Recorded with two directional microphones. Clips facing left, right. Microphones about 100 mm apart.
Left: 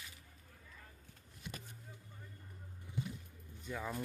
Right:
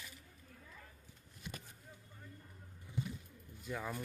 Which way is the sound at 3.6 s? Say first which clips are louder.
Even; centre (ahead or behind).